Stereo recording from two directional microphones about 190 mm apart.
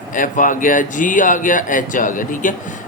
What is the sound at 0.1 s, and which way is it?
Speech, 45° left (ahead or behind).